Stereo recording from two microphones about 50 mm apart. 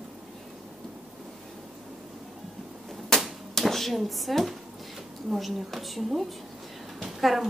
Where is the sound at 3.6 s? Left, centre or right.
Centre.